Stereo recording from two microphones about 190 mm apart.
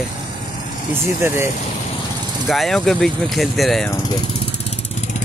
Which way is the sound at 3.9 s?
20° left (ahead or behind).